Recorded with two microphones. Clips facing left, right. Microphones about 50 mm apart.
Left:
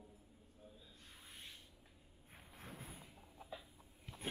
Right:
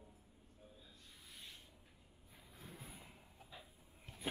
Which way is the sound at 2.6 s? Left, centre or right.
Left.